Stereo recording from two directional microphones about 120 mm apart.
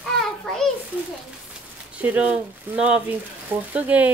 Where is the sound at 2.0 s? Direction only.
10° right (ahead or behind).